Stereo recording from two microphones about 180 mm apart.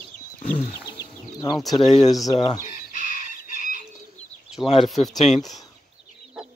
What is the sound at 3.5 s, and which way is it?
Chicken, 50° left (ahead or behind).